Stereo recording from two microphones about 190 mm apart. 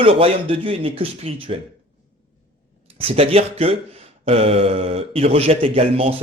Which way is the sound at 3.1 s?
30° right (ahead or behind).